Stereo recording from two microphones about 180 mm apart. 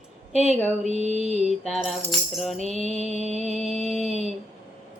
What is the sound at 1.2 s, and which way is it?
Music, 40° right (ahead or behind).